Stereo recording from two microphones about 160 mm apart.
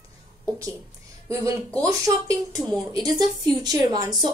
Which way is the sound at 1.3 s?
20° right (ahead or behind).